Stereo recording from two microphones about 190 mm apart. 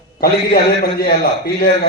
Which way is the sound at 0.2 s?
55° left (ahead or behind).